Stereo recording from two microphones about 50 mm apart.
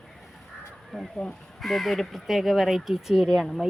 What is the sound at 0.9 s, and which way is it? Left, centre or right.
Speech, centre.